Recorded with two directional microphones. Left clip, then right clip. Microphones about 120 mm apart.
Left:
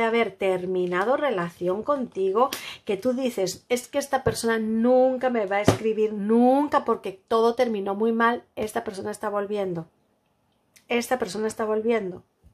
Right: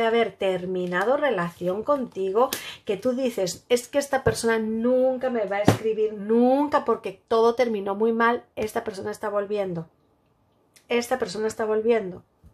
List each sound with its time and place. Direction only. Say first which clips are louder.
0.0 s speech: right 1 dB; 20° left (ahead or behind)
4.7 s speech: left 6 dB; 50° left (ahead or behind); by 9.8 s 20° left (ahead or behind)
10.9 s speech: even; 25° left (ahead or behind)